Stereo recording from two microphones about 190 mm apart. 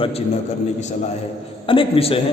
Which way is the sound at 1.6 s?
25° left (ahead or behind).